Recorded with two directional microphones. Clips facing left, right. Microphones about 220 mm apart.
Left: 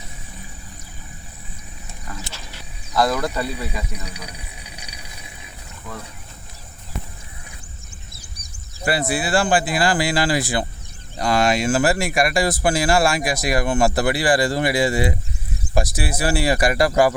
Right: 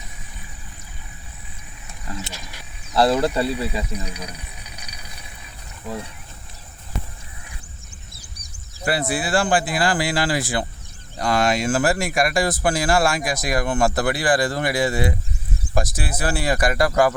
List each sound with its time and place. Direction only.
2.2 s wild animals: 15° right (ahead or behind)
2.9 s speech: 30° right (ahead or behind)
4.8 s vehicle: 30° left (ahead or behind)
5.9 s speech: 30° right (ahead or behind)
8.4 s speech: 10° left (ahead or behind)